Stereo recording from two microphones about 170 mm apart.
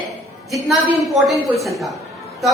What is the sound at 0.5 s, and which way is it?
Speech, centre (ahead or behind).